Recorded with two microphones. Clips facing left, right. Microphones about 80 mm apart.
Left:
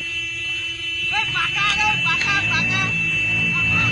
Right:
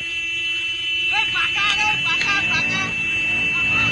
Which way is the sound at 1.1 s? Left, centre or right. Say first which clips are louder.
Even; centre.